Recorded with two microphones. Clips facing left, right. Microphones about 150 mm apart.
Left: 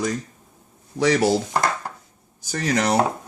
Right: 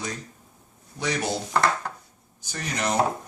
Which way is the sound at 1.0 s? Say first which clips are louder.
Left 9 dB; 85° left.